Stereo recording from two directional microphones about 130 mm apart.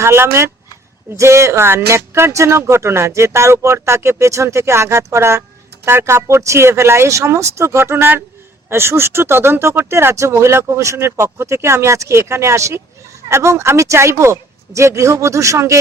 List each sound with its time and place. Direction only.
0.0 s speech: 20° right (ahead or behind)